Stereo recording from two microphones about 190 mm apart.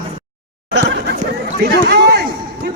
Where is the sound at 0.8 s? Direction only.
65° right (ahead or behind).